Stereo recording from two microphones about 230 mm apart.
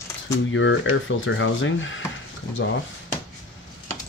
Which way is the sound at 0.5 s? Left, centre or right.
Left.